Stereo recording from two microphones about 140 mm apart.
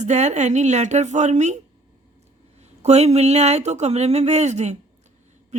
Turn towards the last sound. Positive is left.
turn(degrees=-55)  # may be behind; listen again after turning